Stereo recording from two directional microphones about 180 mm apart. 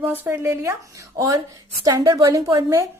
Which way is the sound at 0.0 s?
15° right (ahead or behind).